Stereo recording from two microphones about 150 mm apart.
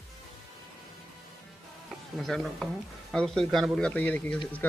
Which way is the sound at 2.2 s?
Centre (ahead or behind).